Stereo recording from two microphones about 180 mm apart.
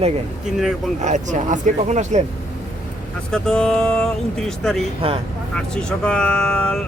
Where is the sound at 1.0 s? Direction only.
45° right (ahead or behind).